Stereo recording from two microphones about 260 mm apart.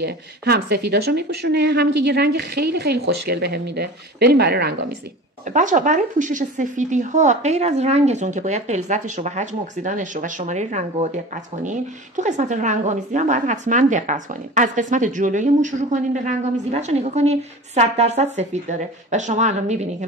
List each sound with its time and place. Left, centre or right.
0.0 s speech: right
12.2 s speech: right